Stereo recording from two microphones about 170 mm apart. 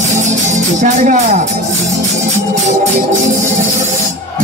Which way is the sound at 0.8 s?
45° right (ahead or behind).